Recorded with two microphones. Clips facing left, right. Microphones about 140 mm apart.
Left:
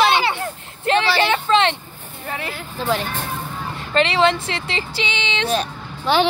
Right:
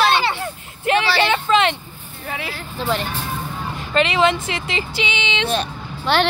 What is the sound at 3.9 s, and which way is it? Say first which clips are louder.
Speech: even; 30° left (ahead or behind).